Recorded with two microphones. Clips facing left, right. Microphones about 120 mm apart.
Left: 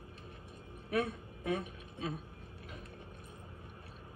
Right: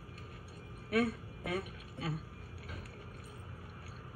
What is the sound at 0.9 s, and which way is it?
A woman's voice, 20° left (ahead or behind).